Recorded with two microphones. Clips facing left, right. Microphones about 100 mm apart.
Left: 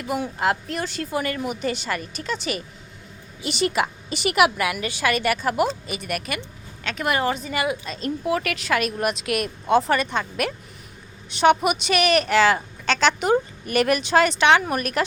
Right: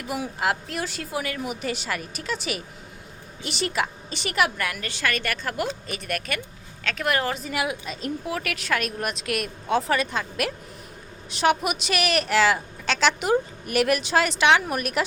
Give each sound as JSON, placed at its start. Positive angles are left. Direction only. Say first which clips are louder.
{"t": 0.1, "sound": "a woman's voice", "louder": "left 3 dB", "side_deg": -5}